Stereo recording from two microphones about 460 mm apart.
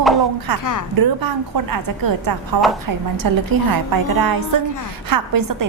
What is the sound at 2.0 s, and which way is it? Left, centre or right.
A woman's voice, right.